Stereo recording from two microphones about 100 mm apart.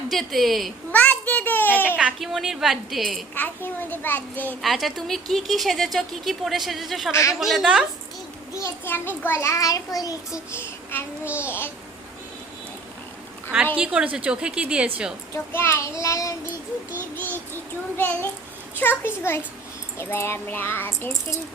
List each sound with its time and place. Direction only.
0.1 s speech: centre (ahead or behind)
0.9 s a sound: 15° left (ahead or behind)
2.1 s speech: centre (ahead or behind)
3.3 s child singing: 20° left (ahead or behind)
4.6 s speech: centre (ahead or behind)
7.1 s child singing: 30° left (ahead or behind)
7.3 s speech: 5° right (ahead or behind)
8.6 s a child's voice: 20° left (ahead or behind); by 10.4 s 35° left (ahead or behind)
10.5 s child singing: 25° left (ahead or behind)
13.7 s a woman's voice: 10° right (ahead or behind)
15.5 s child singing: 25° left (ahead or behind)
17.0 s child singing: 20° left (ahead or behind)